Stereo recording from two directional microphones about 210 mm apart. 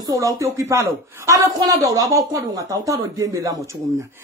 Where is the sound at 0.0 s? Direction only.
15° right (ahead or behind).